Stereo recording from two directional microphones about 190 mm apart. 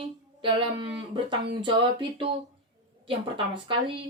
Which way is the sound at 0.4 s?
25° right (ahead or behind).